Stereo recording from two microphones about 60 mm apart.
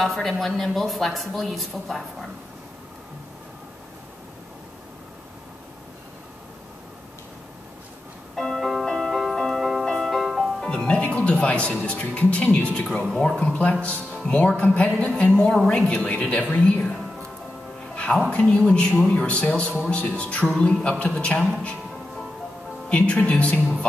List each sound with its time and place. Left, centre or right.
0.0 s speech: centre
8.4 s music: centre
10.6 s music: centre
11.1 s speech: left
12.7 s speech: centre
13.4 s speech: centre
17.9 s music: centre
18.3 s speech: centre
19.1 s speech: left
22.8 s speech: left